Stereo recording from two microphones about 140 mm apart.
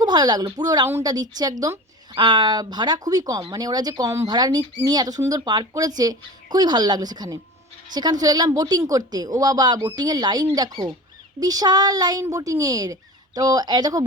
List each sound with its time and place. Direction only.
0.0 s a woman's voice: 30° right (ahead or behind)